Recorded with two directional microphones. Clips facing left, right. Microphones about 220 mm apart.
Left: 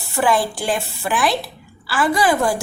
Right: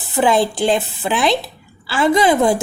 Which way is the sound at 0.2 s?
20° right (ahead or behind).